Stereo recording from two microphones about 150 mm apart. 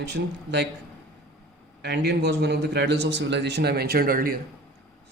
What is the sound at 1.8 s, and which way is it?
Speech, 90° right.